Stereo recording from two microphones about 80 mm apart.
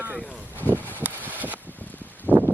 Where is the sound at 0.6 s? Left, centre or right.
Left.